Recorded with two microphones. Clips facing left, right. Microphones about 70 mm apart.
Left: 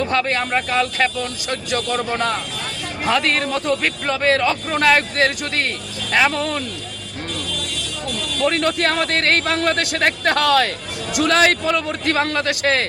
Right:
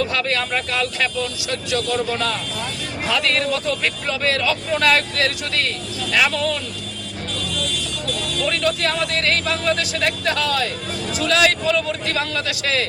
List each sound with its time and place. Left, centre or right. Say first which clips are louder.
0.0 s a man's voice: left 2 dB; left
8.4 s a man's voice: left 3 dB; left
11.2 s a man's voice: left 3 dB; left